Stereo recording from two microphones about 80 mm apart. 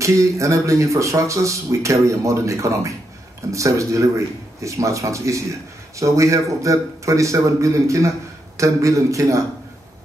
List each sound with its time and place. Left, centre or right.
0.0 s speech: right